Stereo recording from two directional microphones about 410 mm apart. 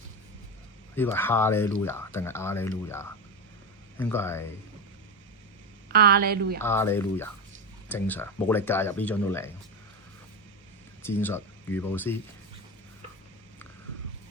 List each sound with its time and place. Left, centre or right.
0.9 s speech: centre
5.9 s a woman's voice: right
6.6 s speech: centre
11.0 s speech: centre